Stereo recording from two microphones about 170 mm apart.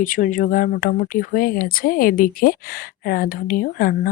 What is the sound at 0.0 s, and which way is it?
Speech, 55° left (ahead or behind).